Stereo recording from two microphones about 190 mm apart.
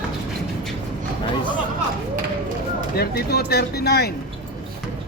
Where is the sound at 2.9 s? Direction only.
55° left (ahead or behind).